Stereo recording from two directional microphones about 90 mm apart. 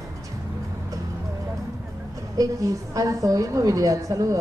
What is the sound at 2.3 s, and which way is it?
A woman's voice, 40° right (ahead or behind).